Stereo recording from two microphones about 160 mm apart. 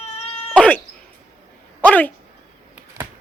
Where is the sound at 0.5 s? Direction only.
10° left (ahead or behind).